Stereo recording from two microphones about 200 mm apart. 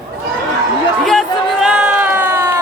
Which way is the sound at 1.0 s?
Centre (ahead or behind).